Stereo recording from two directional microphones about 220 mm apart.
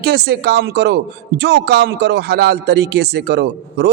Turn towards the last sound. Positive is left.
turn(degrees=-50)  # may be behind; listen again after turning